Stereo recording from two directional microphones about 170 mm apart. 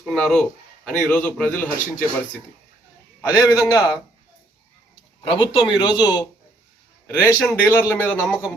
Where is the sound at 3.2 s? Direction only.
20° left (ahead or behind).